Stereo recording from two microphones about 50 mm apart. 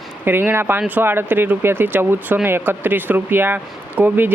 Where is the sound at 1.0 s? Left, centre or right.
Right.